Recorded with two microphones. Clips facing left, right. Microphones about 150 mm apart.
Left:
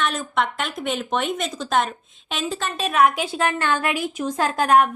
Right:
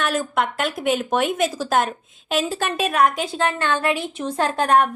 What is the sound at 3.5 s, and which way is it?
Speech, 20° right (ahead or behind).